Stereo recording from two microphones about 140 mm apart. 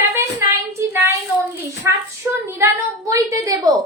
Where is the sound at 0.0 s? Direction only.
15° right (ahead or behind).